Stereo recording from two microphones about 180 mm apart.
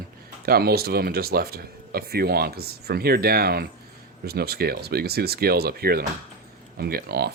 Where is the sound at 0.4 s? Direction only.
60° right (ahead or behind).